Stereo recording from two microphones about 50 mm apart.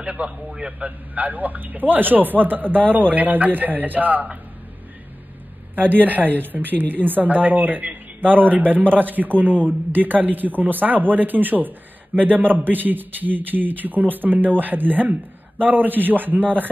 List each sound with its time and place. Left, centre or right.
0.0 s a man's voice: right
5.8 s a woman's voice: right